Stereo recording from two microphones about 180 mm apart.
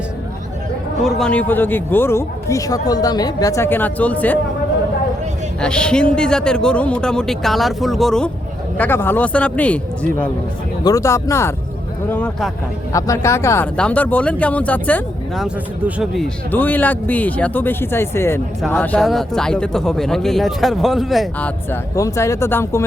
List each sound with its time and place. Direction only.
1.0 s a man's voice: 5° left (ahead or behind)
5.5 s a man's voice: 5° left (ahead or behind)
18.9 s speech: centre (ahead or behind)
21.7 s a man's voice: 15° left (ahead or behind)